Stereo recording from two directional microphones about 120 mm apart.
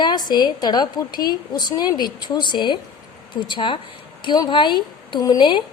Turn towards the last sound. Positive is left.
turn(degrees=40)  # may be behind; listen again after turning